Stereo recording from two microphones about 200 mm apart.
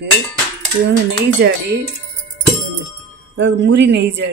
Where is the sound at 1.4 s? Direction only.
55° right (ahead or behind).